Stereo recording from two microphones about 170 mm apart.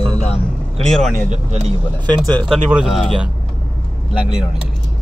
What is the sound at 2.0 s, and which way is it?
Speech, 25° right (ahead or behind).